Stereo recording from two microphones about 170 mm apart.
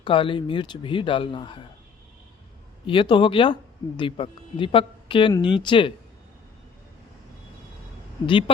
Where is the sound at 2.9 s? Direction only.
30° left (ahead or behind).